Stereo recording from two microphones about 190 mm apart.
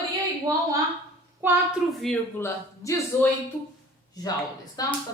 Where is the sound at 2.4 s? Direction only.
15° left (ahead or behind).